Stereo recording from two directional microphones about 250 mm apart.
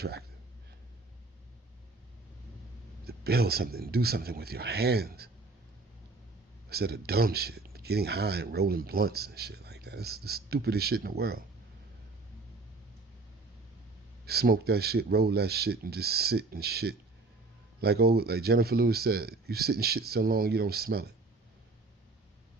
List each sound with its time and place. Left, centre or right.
0.0 s speech: right
3.1 s speech: right
6.7 s speech: right
14.3 s speech: right